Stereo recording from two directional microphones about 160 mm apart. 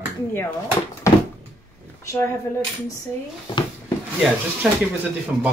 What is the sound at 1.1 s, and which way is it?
Door, 20° left (ahead or behind).